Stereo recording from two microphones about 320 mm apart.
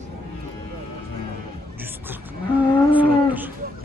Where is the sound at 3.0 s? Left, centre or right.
Centre.